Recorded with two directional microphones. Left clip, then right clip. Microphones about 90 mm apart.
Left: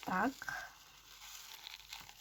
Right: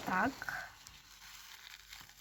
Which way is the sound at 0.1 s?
25° left (ahead or behind).